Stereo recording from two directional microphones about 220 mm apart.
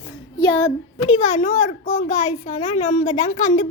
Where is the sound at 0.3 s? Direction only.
20° left (ahead or behind).